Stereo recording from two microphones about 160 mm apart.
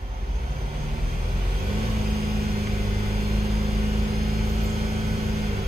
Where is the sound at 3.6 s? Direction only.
40° right (ahead or behind).